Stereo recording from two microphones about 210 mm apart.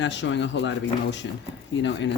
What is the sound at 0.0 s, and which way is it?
Speech, 60° left (ahead or behind).